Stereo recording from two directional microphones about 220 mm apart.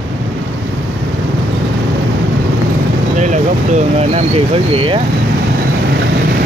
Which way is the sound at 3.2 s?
30° right (ahead or behind).